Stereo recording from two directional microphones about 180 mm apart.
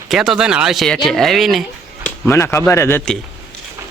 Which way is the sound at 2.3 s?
15° left (ahead or behind).